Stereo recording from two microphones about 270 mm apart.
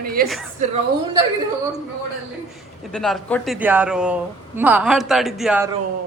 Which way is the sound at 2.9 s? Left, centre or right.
Centre.